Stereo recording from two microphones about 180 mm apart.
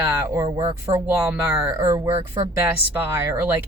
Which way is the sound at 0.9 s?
10° right (ahead or behind).